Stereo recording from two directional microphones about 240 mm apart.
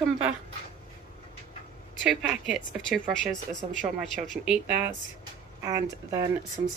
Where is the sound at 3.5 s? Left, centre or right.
Right.